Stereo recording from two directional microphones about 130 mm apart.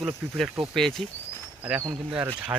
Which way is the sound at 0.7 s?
5° left (ahead or behind).